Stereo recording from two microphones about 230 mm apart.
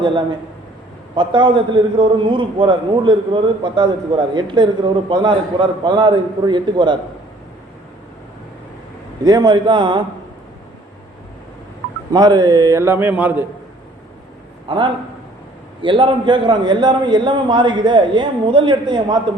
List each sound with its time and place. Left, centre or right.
1.1 s a man's voice: centre
9.2 s a man's voice: centre
12.1 s a man's voice: centre
14.7 s a man's voice: right